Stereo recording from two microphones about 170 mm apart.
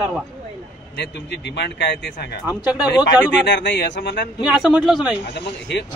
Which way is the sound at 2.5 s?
10° right (ahead or behind).